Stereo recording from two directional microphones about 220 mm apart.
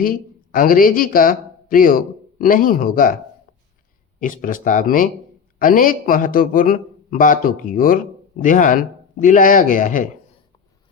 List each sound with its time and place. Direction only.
0.0 s speech: 40° left (ahead or behind)
4.2 s a man's voice: 40° left (ahead or behind)